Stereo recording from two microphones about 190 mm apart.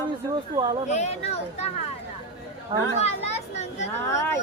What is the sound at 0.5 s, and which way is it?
Speech, 25° right (ahead or behind).